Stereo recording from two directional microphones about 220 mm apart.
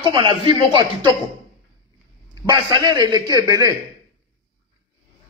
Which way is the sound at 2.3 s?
15° right (ahead or behind).